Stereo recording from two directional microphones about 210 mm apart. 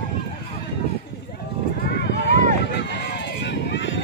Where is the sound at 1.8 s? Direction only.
50° left (ahead or behind).